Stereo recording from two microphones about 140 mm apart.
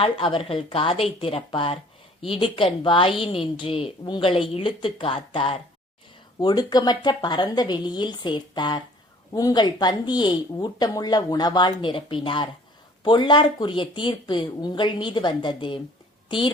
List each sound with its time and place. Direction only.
0.0 s speech: 40° left (ahead or behind)
6.4 s speech: 30° left (ahead or behind)